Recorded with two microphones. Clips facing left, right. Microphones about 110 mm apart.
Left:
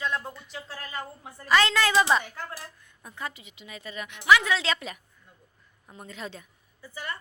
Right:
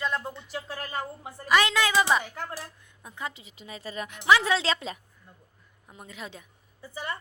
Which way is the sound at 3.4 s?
35° right (ahead or behind).